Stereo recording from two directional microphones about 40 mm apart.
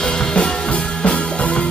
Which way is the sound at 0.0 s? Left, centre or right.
Left.